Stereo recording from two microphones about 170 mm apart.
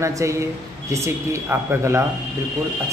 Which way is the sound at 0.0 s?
15° right (ahead or behind).